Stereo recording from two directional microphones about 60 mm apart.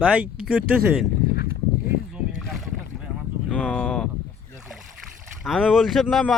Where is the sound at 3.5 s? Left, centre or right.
Centre.